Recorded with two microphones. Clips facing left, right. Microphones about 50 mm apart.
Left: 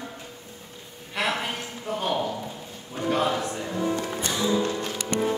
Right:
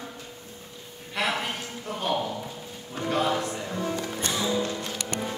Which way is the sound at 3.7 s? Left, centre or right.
Centre.